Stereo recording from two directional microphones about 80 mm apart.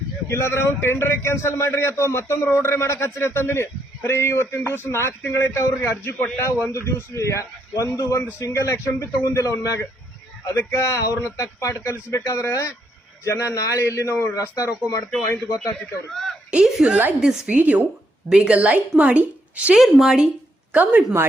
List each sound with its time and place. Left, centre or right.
0.3 s a man's voice: left
14.8 s a man's voice: left
15.8 s a man's voice: centre
16.5 s a woman's voice: centre
19.8 s a man's voice: centre